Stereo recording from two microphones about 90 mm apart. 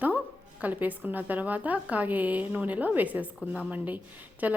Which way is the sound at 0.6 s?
20° right (ahead or behind).